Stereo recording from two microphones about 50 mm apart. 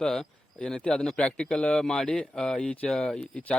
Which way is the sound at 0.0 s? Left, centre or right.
Centre.